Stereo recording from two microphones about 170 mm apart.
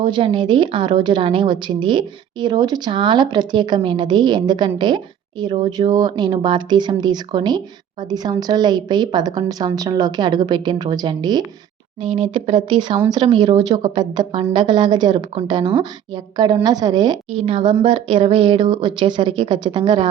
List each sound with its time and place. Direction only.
0.0 s a woman's voice: 30° right (ahead or behind)